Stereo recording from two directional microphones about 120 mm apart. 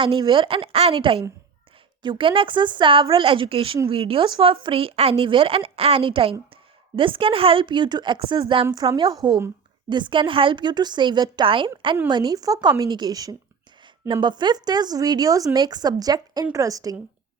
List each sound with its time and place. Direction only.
0.0 s a woman's voice: 40° right (ahead or behind)